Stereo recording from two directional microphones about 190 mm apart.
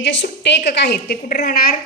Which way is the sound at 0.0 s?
70° left (ahead or behind).